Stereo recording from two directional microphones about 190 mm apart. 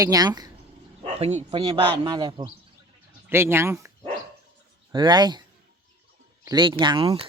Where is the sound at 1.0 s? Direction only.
30° right (ahead or behind).